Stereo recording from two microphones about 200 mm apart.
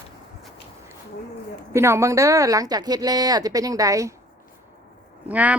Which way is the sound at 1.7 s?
15° right (ahead or behind).